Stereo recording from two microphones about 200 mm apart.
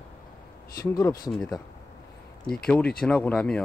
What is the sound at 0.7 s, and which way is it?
Speech, 15° left (ahead or behind).